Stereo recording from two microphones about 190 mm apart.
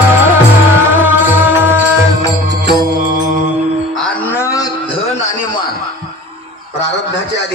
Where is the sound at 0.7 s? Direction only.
10° right (ahead or behind).